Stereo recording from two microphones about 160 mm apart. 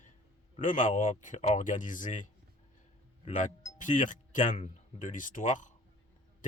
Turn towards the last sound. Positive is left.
turn(degrees=50)  # may be behind; listen again after turning